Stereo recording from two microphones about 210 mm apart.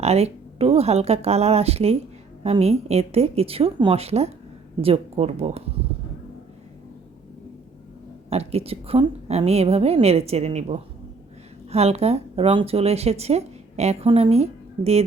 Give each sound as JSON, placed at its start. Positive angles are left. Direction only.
{"t": 0.0, "sound": "a woman's voice", "side_deg": -30}
{"t": 8.3, "sound": "a woman's voice", "side_deg": -30}